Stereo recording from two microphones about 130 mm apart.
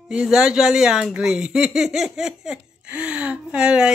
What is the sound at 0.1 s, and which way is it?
Speech, 5° right (ahead or behind).